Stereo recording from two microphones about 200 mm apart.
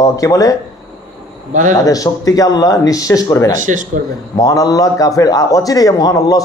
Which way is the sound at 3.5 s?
40° right (ahead or behind).